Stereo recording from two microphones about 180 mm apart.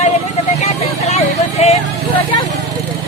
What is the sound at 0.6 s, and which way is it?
Speech, 35° left (ahead or behind).